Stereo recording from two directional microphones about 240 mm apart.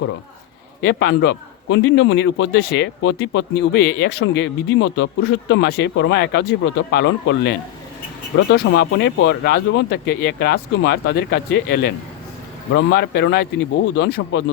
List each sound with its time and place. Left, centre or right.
0.8 s a man's voice: left
8.5 s a man's voice: left